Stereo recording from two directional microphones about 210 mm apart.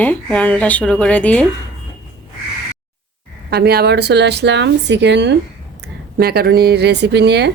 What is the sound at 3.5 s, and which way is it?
Speech, 50° right (ahead or behind).